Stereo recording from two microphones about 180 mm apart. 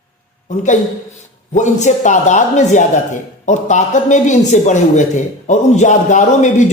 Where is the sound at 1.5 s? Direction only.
40° left (ahead or behind).